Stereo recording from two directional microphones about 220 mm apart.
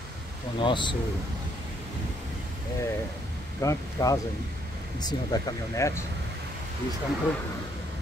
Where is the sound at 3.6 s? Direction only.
15° left (ahead or behind).